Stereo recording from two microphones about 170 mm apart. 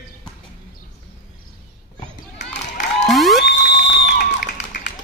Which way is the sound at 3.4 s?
65° left (ahead or behind).